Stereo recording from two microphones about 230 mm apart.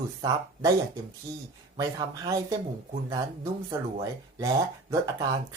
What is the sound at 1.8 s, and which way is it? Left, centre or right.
Speech, centre.